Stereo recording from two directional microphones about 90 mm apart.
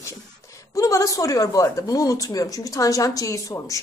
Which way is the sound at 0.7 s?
40° left (ahead or behind).